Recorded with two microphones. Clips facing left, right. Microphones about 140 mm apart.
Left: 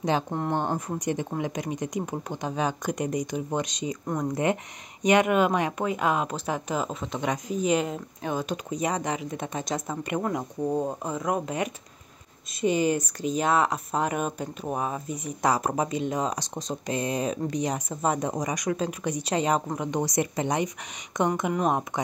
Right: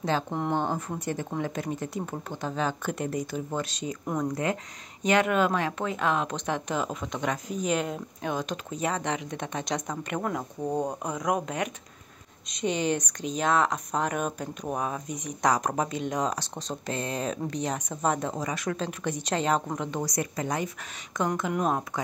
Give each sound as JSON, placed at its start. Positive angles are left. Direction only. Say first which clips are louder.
{"t": 0.3, "sound": "speech", "louder": "even", "side_deg": 0}
{"t": 0.6, "sound": "speech", "louder": "left 1 dB", "side_deg": 15}
{"t": 20.2, "sound": "speech", "louder": "left 3 dB", "side_deg": 25}
{"t": 21.9, "sound": "speech", "louder": "left 3 dB", "side_deg": 20}